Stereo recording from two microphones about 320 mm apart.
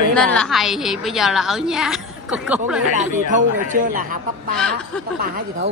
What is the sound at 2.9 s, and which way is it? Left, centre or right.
A woman's voice, right.